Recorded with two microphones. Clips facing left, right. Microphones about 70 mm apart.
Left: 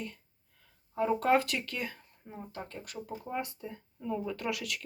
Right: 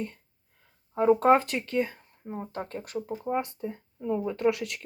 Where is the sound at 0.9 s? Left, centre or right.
Right.